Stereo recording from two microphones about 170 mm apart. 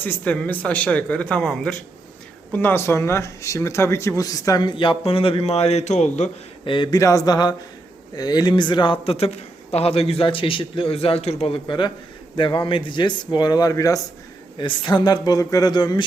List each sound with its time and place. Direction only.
0.0 s speech: 10° left (ahead or behind); by 6.3 s 40° left (ahead or behind)
6.7 s a man's voice: 30° left (ahead or behind)